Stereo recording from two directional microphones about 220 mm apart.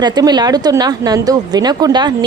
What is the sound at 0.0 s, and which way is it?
A woman's voice, 20° right (ahead or behind).